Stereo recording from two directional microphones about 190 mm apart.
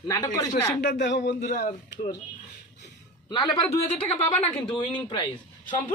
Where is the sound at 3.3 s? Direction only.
20° left (ahead or behind).